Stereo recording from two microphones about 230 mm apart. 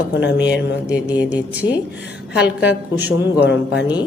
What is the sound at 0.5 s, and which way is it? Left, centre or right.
Speech, centre.